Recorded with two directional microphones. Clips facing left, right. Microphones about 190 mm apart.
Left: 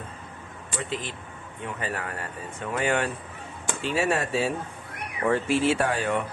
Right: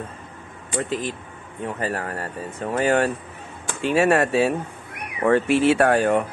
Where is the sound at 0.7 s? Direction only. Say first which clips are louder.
Right 7 dB; 45° right (ahead or behind).